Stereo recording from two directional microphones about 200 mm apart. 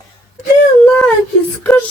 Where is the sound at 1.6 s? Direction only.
10° left (ahead or behind).